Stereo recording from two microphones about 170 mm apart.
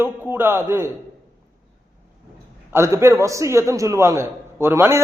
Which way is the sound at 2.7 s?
15° right (ahead or behind).